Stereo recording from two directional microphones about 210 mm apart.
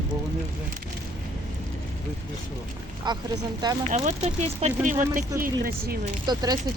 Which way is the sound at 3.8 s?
35° right (ahead or behind).